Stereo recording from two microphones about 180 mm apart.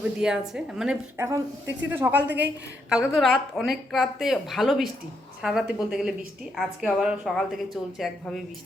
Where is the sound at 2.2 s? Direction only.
70° right (ahead or behind).